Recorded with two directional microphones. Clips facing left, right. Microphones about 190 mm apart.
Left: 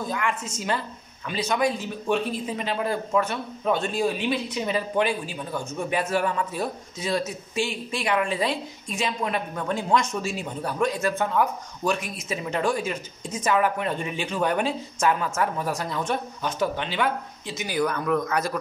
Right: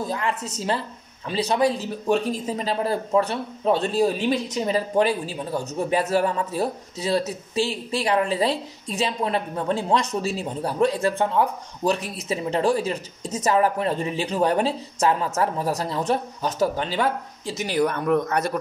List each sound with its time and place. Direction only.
0.0 s speech: 35° right (ahead or behind)